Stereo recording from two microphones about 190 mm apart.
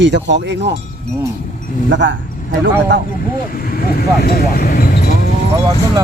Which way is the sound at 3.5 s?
50° left (ahead or behind).